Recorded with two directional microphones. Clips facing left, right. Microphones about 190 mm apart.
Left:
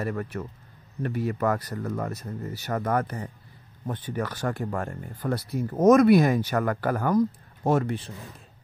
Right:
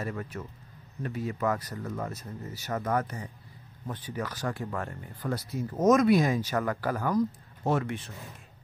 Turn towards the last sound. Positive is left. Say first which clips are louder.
# left 4 dB
turn(degrees=45)  # may be behind; listen again after turning